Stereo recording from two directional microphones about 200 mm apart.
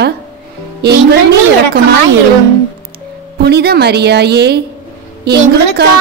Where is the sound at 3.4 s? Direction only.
55° right (ahead or behind).